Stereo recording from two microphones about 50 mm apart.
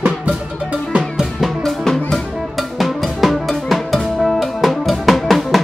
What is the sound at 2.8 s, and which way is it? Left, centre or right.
Drum, centre.